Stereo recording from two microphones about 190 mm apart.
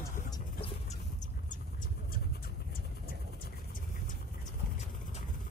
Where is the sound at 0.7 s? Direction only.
40° left (ahead or behind).